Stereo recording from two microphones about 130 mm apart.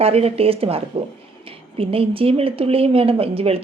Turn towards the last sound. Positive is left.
turn(degrees=-50)  # may be behind; listen again after turning